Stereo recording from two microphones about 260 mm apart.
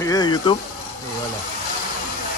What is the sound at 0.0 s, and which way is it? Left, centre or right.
Speech, centre.